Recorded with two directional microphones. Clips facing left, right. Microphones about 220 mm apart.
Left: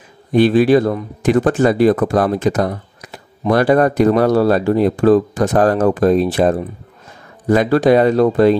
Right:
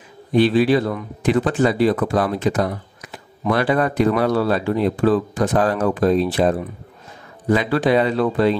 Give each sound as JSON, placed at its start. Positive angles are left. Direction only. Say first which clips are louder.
{"t": 0.3, "sound": "speech", "louder": "left 4 dB", "side_deg": 50}